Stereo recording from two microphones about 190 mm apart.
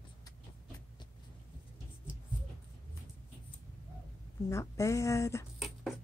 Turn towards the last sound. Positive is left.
turn(degrees=0)  # may be behind; listen again after turning